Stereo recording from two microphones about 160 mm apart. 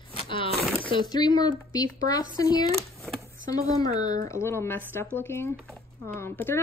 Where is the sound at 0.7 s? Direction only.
30° left (ahead or behind).